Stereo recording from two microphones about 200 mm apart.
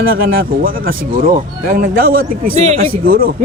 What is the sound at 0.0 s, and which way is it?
Speech, 45° right (ahead or behind).